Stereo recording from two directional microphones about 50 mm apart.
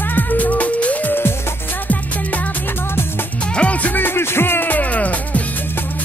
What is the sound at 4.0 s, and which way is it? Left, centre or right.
Music, left.